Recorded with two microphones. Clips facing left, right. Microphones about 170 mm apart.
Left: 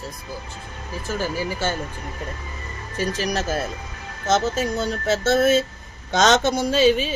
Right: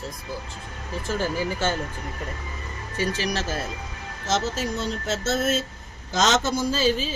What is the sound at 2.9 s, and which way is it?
Speech, 40° left (ahead or behind).